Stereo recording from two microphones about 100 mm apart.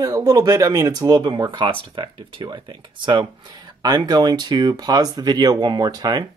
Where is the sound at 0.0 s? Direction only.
40° right (ahead or behind).